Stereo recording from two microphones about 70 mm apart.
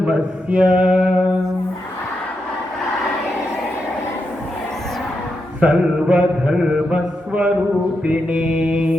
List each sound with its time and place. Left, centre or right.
0.0 s mantra: centre
5.5 s mantra: centre